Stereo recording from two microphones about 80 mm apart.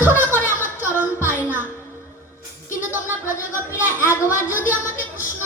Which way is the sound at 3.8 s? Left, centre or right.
Right.